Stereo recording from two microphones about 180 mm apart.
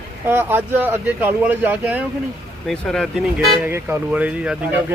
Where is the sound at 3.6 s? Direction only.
10° right (ahead or behind).